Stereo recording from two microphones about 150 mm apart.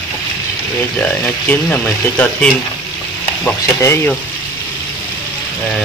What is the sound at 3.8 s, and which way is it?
Speech, 20° left (ahead or behind).